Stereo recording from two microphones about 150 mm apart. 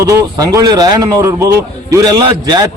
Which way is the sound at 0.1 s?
25° right (ahead or behind).